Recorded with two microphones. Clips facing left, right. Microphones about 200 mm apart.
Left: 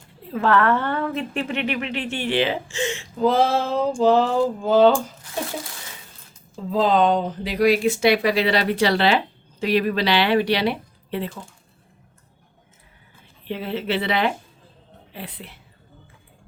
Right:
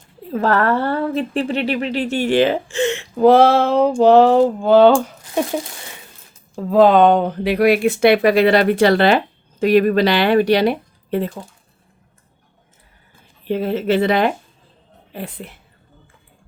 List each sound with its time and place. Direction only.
0.3 s a woman's voice: 40° right (ahead or behind); by 5.4 s 65° right (ahead or behind)
6.6 s speech: 65° right (ahead or behind); by 11.3 s 45° right (ahead or behind)
13.4 s speech: 45° right (ahead or behind)